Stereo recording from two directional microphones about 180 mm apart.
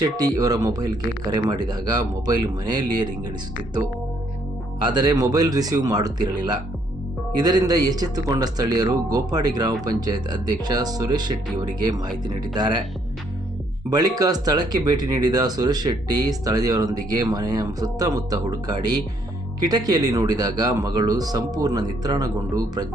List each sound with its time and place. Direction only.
0.0 s speech: 20° right (ahead or behind)
4.9 s speech: 20° right (ahead or behind)
13.9 s speech: 20° right (ahead or behind)